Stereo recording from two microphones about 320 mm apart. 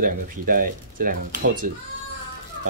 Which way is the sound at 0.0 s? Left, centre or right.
Right.